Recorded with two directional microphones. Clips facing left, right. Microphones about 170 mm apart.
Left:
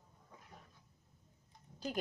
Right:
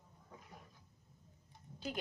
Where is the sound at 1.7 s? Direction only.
45° left (ahead or behind).